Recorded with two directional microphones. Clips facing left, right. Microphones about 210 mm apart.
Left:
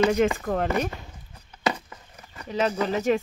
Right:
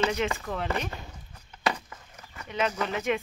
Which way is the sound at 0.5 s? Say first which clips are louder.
Left 6 dB; 45° left (ahead or behind).